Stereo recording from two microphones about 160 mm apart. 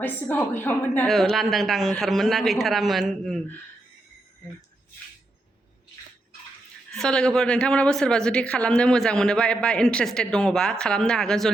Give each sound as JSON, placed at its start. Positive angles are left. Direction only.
{"t": 0.0, "sound": "a woman's voice", "side_deg": 10}
{"t": 1.0, "sound": "speech", "side_deg": 0}
{"t": 6.9, "sound": "speech", "side_deg": 5}